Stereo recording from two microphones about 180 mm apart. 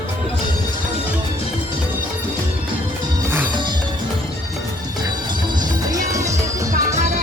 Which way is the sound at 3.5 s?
25° right (ahead or behind).